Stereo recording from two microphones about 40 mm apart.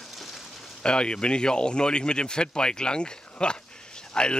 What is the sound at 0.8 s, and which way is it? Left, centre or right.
Speech, left.